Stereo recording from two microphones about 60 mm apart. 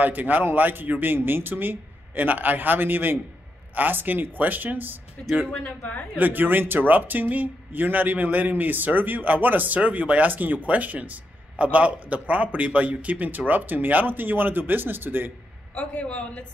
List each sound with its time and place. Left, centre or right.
0.0 s speech: right
5.6 s a man's voice: left
6.1 s a man's voice: right
15.7 s a man's voice: left